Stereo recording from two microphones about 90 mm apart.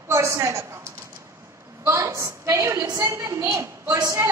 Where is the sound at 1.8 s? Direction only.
35° right (ahead or behind).